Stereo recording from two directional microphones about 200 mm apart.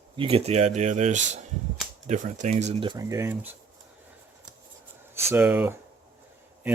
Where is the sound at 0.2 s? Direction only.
30° right (ahead or behind).